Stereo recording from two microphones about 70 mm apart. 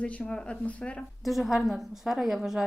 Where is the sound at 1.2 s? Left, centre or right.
Centre.